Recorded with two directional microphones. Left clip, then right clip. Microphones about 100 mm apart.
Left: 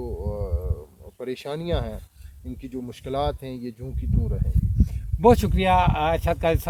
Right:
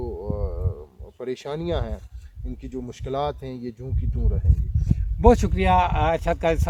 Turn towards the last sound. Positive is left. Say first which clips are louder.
# even
turn(degrees=10)  # may be behind; listen again after turning